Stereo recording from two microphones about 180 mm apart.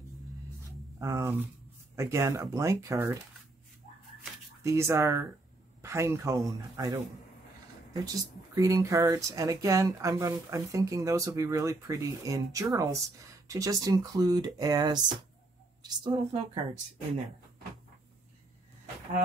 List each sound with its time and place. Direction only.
0.9 s speech: 15° right (ahead or behind)
4.6 s a woman's voice: 15° right (ahead or behind)